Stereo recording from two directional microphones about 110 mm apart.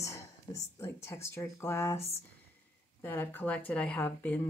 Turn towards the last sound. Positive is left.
turn(degrees=15)  # may be behind; listen again after turning